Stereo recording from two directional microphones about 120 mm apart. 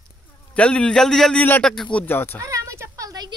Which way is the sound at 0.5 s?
10° left (ahead or behind).